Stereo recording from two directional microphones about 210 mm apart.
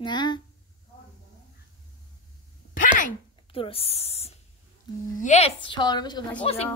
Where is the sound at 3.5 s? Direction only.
25° left (ahead or behind).